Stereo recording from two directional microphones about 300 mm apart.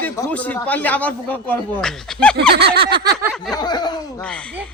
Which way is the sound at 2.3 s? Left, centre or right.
Right.